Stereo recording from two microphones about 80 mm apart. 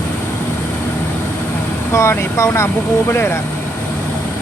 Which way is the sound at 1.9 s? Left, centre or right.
Left.